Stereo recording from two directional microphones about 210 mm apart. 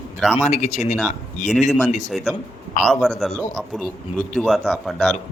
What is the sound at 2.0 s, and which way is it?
A man's voice, centre (ahead or behind).